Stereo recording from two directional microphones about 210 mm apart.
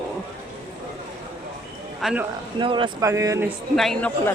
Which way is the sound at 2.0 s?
Centre (ahead or behind).